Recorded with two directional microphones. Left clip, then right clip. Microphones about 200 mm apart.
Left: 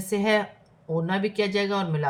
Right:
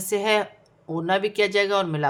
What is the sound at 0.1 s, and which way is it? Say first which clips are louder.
Speech: right 2 dB; 40° right (ahead or behind).